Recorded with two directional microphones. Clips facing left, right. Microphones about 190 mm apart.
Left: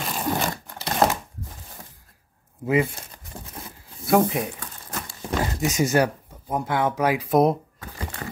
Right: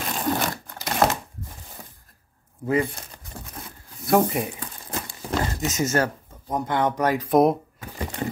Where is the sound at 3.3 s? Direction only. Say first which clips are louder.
Even; 15° left (ahead or behind).